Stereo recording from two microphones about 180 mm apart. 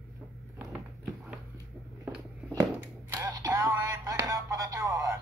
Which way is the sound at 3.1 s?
15° right (ahead or behind).